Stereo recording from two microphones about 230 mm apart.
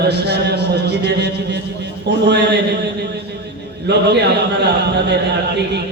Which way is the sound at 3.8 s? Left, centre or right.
Right.